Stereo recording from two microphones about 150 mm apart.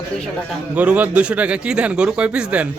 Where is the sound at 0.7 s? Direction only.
10° right (ahead or behind).